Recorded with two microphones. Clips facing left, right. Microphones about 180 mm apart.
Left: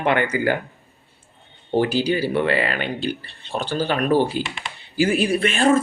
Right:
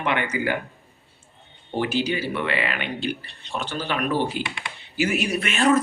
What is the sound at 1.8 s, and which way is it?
Speech, 35° left (ahead or behind).